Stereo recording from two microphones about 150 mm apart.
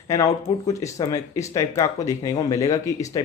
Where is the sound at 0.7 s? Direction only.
20° left (ahead or behind).